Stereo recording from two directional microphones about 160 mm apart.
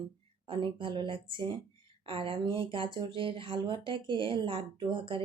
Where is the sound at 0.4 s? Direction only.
30° right (ahead or behind).